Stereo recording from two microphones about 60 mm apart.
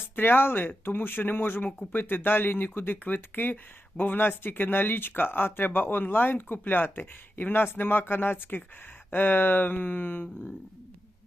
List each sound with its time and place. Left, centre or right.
0.2 s speech: left